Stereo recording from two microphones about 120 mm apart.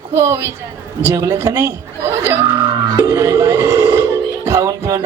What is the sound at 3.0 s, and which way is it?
Dial tone, 25° right (ahead or behind).